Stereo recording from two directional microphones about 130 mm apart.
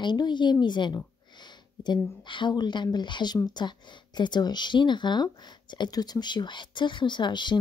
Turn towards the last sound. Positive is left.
turn(degrees=35)  # may be behind; listen again after turning